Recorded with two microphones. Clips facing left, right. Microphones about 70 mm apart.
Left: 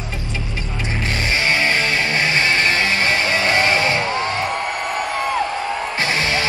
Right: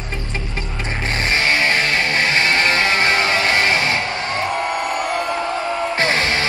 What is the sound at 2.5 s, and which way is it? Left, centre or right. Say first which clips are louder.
Music: right 1 dB; right.